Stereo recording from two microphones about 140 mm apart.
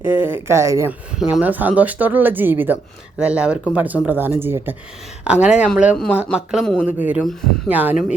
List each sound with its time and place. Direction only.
0.0 s speech: 15° right (ahead or behind)